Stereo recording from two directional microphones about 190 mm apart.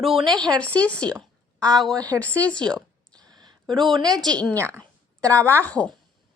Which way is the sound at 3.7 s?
25° right (ahead or behind).